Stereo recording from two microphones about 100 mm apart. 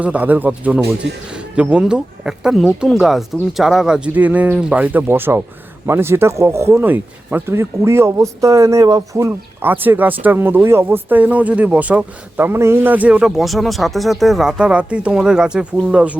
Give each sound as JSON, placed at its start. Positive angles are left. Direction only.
{"t": 0.0, "sound": "speech", "side_deg": -15}
{"t": 9.6, "sound": "speech", "side_deg": -20}